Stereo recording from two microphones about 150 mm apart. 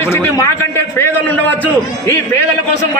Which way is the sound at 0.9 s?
15° left (ahead or behind).